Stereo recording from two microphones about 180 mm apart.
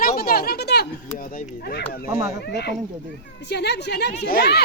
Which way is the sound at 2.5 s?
70° left (ahead or behind).